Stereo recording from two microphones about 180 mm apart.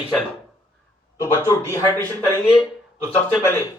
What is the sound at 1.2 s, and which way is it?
Speech, 15° left (ahead or behind).